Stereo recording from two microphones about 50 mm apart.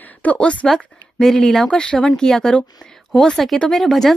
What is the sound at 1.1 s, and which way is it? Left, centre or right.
A woman's voice, centre.